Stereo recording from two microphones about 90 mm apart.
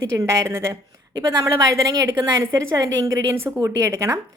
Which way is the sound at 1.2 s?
50° right (ahead or behind).